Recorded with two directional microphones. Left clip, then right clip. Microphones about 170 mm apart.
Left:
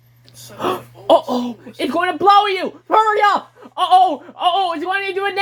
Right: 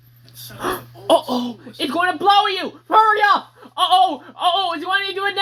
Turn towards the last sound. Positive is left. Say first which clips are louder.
# even
turn(degrees=40)  # may be behind; listen again after turning